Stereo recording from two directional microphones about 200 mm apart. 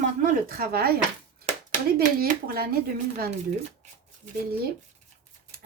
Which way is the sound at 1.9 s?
50° right (ahead or behind).